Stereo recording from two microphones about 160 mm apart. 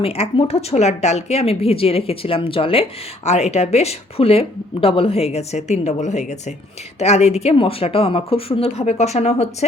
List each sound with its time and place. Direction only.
0.0 s speech: 40° left (ahead or behind)